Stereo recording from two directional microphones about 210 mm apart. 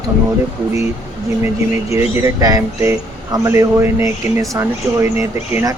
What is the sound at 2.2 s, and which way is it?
Speech, 15° right (ahead or behind).